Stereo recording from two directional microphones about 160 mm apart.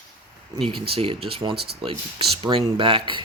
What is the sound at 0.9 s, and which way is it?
Speech, 40° right (ahead or behind).